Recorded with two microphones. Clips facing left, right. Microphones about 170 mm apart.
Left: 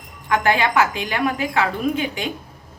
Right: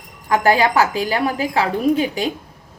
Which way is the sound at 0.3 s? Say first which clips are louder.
Right 3 dB; 35° right (ahead or behind).